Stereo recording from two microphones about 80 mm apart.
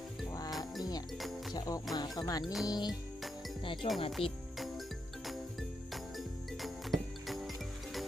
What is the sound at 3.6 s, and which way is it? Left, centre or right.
Speech, left.